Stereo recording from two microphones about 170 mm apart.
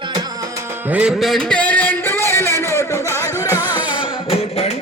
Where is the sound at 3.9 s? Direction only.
30° left (ahead or behind).